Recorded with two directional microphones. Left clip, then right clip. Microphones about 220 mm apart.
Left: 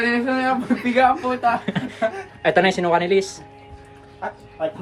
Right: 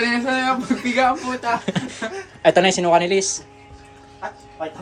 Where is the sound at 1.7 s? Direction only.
20° right (ahead or behind).